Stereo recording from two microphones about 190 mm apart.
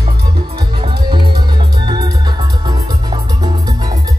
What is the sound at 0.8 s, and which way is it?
Music, 25° right (ahead or behind).